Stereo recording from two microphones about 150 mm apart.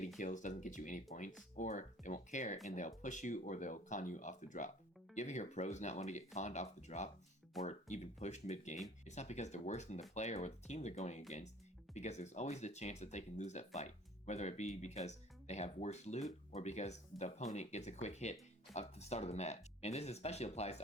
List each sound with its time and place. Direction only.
0.2 s speech: 60° left (ahead or behind)